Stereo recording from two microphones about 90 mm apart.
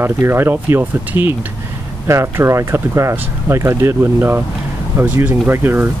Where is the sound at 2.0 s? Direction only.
30° right (ahead or behind).